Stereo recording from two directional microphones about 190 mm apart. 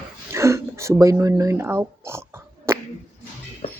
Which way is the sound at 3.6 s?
35° left (ahead or behind).